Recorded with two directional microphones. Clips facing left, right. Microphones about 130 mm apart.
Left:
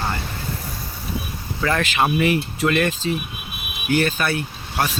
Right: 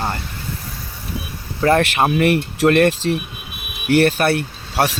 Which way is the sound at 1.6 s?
50° right (ahead or behind).